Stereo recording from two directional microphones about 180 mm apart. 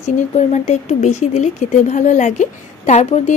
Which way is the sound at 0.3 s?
40° left (ahead or behind).